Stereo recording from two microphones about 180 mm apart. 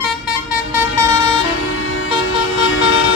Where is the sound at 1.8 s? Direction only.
90° left.